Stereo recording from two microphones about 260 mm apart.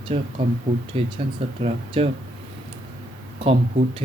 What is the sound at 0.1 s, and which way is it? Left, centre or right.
Speech, right.